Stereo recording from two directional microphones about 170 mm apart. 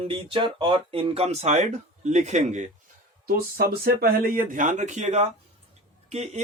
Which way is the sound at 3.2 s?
60° right (ahead or behind).